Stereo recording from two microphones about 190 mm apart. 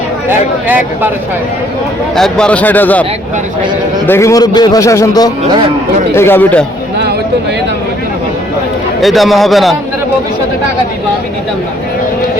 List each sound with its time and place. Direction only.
0.3 s speech: 10° right (ahead or behind)
2.1 s speech: centre (ahead or behind)
9.0 s a man's voice: centre (ahead or behind)